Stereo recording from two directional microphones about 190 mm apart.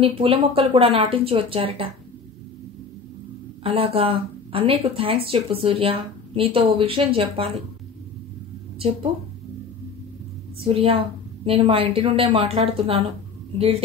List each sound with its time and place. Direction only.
0.0 s speech: 30° right (ahead or behind)
3.6 s speech: 30° right (ahead or behind)
10.6 s a woman's voice: 30° right (ahead or behind)